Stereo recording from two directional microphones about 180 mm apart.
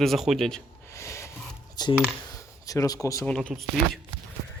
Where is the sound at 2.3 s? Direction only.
20° left (ahead or behind).